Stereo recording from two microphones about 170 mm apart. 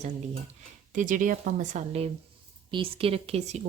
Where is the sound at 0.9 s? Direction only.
50° right (ahead or behind).